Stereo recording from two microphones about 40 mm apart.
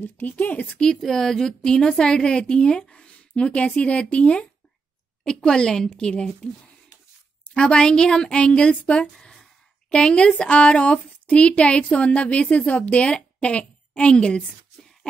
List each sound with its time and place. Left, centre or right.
0.2 s speech: left
0.7 s a woman's voice: left
1.0 s a woman's voice: centre; by 4.5 s left
5.2 s a woman's voice: centre
7.6 s a woman's voice: left
9.1 s a sound: centre
9.8 s a woman's voice: left